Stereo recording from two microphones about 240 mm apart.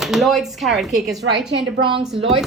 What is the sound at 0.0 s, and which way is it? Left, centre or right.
A woman's voice, centre.